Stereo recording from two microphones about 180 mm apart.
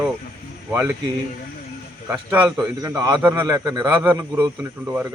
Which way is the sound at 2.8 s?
20° right (ahead or behind).